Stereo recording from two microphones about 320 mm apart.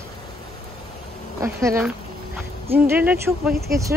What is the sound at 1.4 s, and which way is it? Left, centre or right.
Speech, centre.